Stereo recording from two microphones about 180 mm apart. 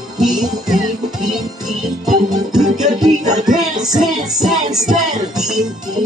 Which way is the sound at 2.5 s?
5° right (ahead or behind).